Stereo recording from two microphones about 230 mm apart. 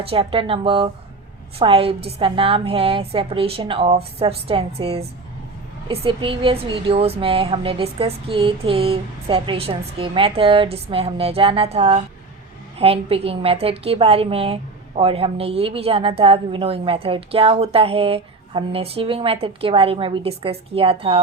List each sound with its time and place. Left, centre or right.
0.0 s a woman's voice: right